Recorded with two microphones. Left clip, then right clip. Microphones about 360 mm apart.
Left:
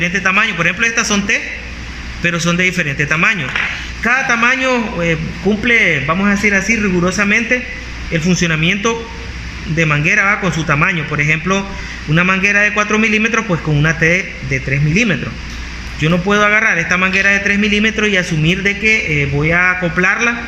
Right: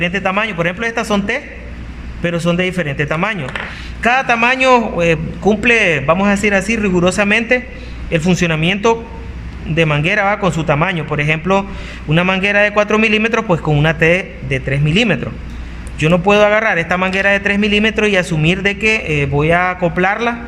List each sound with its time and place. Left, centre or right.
0.0 s a man's voice: right